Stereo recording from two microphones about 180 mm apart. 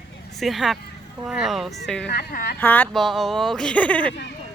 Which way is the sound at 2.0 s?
60° left (ahead or behind).